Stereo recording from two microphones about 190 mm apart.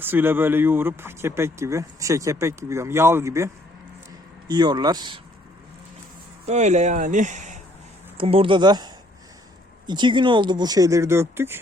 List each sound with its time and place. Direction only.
0.0 s speech: 10° right (ahead or behind)
6.4 s speech: 35° right (ahead or behind)
8.2 s speech: 30° right (ahead or behind); by 11.6 s 10° right (ahead or behind)